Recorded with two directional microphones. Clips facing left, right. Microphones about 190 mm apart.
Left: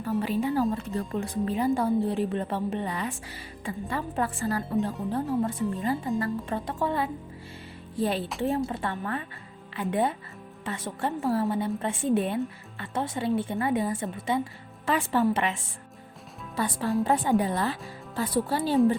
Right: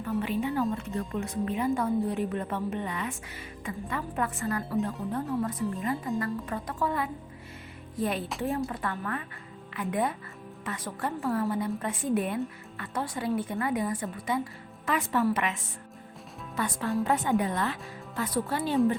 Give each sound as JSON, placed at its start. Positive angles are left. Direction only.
{"t": 0.0, "sound": "a woman's voice", "side_deg": 35}
{"t": 16.6, "sound": "speech", "side_deg": 30}